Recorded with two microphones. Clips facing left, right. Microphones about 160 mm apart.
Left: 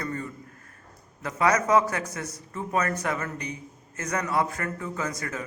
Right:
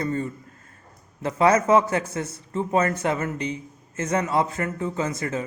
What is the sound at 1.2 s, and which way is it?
A man's voice, 30° right (ahead or behind).